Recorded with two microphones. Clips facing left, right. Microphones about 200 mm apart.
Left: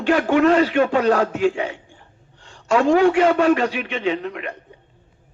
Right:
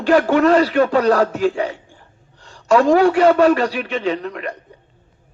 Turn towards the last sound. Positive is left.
turn(degrees=-40)  # may be behind; listen again after turning